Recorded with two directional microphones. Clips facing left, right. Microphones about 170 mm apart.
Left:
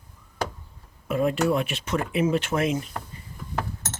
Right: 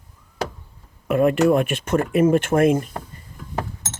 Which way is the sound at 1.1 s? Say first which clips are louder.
Right 6 dB; 60° right (ahead or behind).